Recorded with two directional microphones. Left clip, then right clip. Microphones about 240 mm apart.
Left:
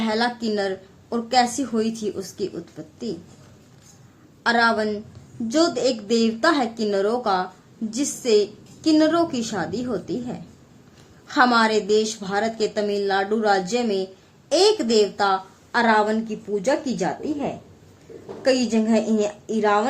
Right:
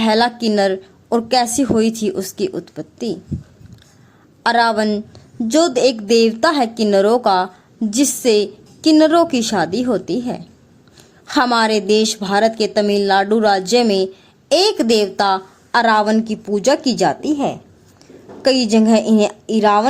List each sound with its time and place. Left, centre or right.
0.0 s a woman's voice: right
4.4 s a woman's voice: right